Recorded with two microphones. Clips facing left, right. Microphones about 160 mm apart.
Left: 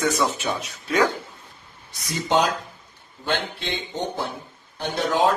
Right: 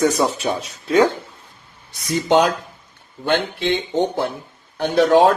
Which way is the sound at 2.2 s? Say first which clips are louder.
Right 5 dB; 70° right (ahead or behind).